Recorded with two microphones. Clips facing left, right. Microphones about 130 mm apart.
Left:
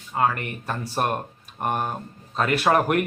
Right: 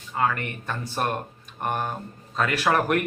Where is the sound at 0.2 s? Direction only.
30° left (ahead or behind).